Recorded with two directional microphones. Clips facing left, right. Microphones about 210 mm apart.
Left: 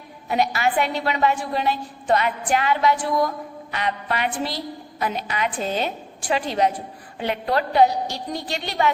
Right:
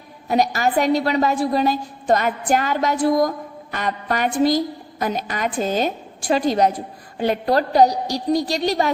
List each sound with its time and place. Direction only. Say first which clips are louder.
0.3 s a woman's voice: right 3 dB; 40° right (ahead or behind)